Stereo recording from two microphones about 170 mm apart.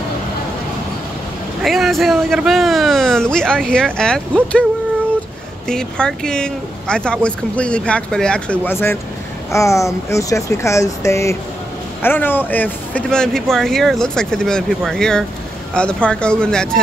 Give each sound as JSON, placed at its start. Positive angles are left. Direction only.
{"t": 1.6, "sound": "speech", "side_deg": 0}
{"t": 5.7, "sound": "speech", "side_deg": 5}